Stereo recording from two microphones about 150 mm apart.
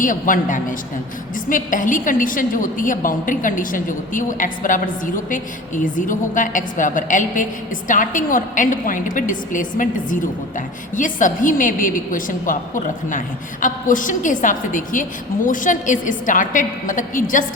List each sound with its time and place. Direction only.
0.0 s a woman's voice: 60° left (ahead or behind)